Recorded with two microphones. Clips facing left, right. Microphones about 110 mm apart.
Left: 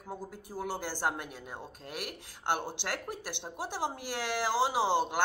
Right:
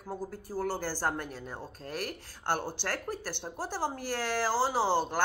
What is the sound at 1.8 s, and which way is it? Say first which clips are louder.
Speech: right 6 dB; 40° right (ahead or behind).